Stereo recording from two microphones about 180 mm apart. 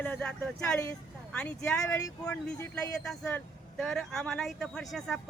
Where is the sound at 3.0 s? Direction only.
5° left (ahead or behind).